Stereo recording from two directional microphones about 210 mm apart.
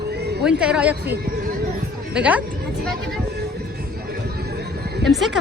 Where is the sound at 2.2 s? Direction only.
5° right (ahead or behind).